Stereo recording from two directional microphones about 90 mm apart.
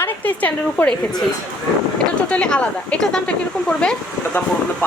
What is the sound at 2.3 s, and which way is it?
Speech, 10° left (ahead or behind).